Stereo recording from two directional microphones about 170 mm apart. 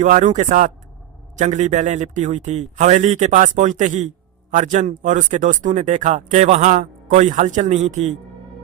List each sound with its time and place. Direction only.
0.0 s speech: 45° right (ahead or behind)